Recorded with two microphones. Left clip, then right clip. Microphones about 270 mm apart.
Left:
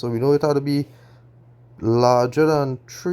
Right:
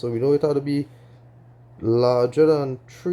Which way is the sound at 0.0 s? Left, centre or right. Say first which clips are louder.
Left 1 dB; left.